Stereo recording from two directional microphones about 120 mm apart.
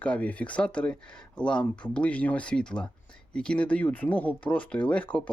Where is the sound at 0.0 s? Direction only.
10° left (ahead or behind).